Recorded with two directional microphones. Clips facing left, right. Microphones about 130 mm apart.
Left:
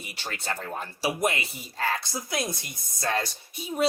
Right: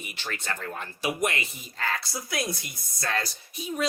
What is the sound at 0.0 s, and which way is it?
Speech, 35° left (ahead or behind).